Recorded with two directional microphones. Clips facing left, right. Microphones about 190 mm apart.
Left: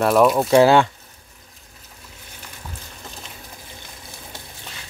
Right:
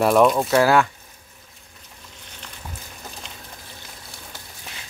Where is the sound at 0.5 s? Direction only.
25° left (ahead or behind).